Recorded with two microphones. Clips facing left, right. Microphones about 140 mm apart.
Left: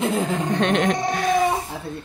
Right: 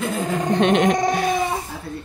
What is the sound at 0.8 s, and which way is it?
Speech, 20° right (ahead or behind).